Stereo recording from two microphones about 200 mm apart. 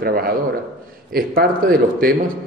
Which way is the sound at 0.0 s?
45° right (ahead or behind).